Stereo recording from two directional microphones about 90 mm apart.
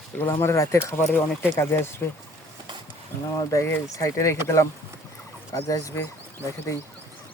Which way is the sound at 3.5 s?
35° left (ahead or behind).